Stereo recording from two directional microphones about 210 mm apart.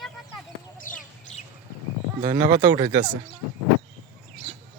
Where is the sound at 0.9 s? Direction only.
40° left (ahead or behind).